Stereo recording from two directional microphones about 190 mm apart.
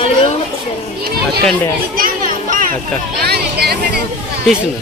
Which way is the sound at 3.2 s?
55° right (ahead or behind).